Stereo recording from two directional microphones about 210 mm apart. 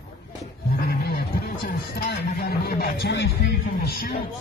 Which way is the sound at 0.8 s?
50° left (ahead or behind).